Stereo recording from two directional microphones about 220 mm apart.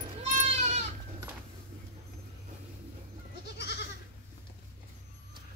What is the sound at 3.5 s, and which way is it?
Goat, 50° left (ahead or behind).